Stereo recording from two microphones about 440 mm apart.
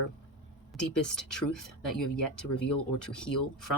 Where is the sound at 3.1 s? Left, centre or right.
Centre.